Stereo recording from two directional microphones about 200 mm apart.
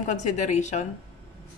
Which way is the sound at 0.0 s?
35° left (ahead or behind).